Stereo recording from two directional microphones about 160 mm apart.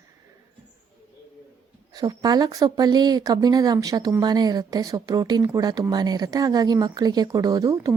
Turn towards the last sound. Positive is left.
turn(degrees=-20)  # may be behind; listen again after turning